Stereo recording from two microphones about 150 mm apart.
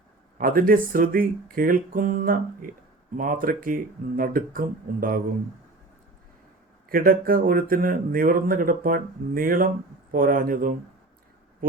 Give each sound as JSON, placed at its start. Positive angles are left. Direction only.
{"t": 0.3, "sound": "speech", "side_deg": -70}
{"t": 6.8, "sound": "speech", "side_deg": -75}